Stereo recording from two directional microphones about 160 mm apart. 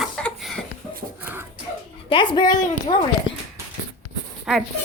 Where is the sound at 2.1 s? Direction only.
30° left (ahead or behind).